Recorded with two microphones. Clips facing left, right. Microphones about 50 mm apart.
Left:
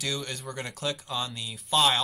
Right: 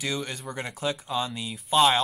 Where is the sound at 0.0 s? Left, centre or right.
Centre.